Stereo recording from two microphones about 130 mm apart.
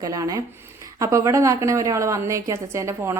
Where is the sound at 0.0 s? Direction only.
25° right (ahead or behind).